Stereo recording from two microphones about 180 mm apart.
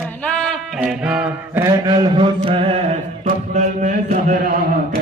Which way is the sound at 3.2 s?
45° right (ahead or behind).